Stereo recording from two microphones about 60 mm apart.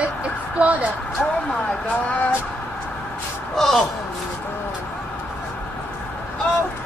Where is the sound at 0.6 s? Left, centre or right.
Right.